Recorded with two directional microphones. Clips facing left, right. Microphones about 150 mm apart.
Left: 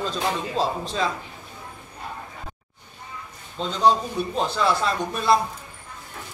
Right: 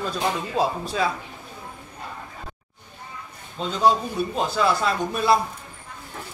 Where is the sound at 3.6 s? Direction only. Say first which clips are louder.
Even; 5° right (ahead or behind).